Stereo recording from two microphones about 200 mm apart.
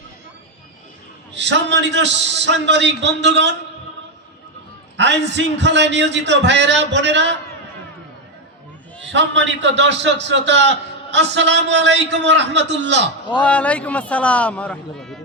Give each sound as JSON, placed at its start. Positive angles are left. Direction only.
{"t": 1.3, "sound": "a man's voice", "side_deg": -60}
{"t": 4.9, "sound": "a man's voice", "side_deg": -60}
{"t": 9.1, "sound": "a man's voice", "side_deg": -65}
{"t": 13.4, "sound": "a man's voice", "side_deg": 5}